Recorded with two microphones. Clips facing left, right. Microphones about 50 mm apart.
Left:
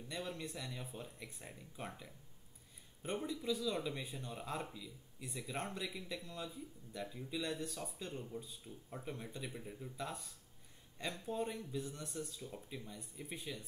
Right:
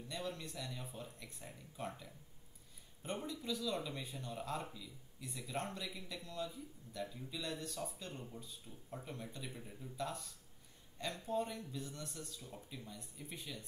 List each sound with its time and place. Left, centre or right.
0.1 s speech: centre